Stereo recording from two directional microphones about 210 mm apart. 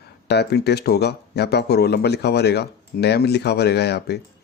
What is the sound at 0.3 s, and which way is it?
Speech, 50° left (ahead or behind).